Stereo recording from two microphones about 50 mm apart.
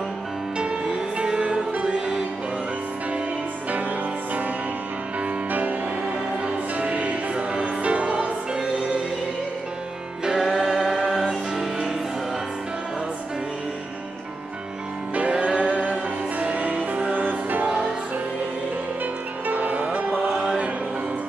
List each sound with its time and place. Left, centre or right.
0.6 s music: centre
5.5 s music: right
6.4 s music: right
10.2 s music: centre
15.3 s music: right
19.4 s music: right
20.2 s music: centre